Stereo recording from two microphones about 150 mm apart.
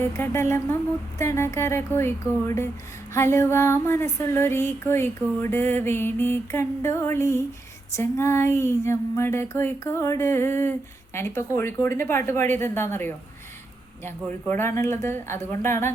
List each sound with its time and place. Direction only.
0.0 s speech: 15° left (ahead or behind)